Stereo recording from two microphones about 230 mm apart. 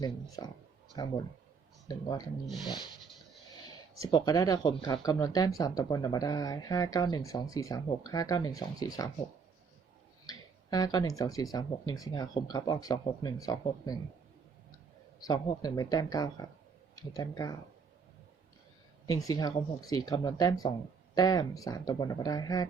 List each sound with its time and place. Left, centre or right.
0.4 s speech: centre
4.0 s speech: centre
10.2 s speech: centre
15.2 s speech: centre
19.0 s speech: centre